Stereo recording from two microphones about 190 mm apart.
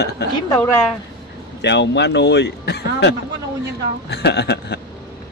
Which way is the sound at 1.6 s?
65° left (ahead or behind).